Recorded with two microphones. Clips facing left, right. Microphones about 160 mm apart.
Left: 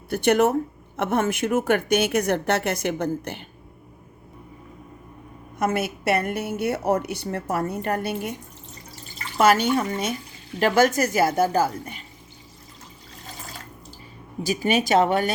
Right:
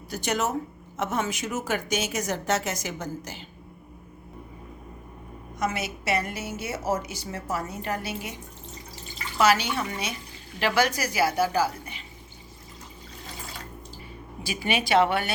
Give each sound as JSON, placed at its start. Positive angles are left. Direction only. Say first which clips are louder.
{"t": 0.1, "sound": "a woman's voice", "louder": "left 8 dB", "side_deg": 55}
{"t": 5.5, "sound": "a woman's voice", "louder": "left 5 dB", "side_deg": 55}
{"t": 9.4, "sound": "a woman's voice", "louder": "left 4 dB", "side_deg": 50}
{"t": 14.4, "sound": "a woman's voice", "louder": "left 6 dB", "side_deg": 40}